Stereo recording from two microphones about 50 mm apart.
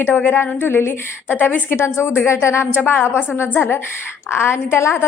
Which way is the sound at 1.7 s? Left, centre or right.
Left.